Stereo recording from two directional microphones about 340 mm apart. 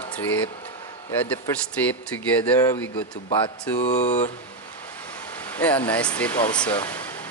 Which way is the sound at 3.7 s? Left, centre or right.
Centre.